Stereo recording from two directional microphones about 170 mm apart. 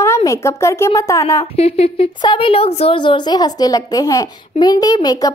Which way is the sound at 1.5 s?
35° left (ahead or behind).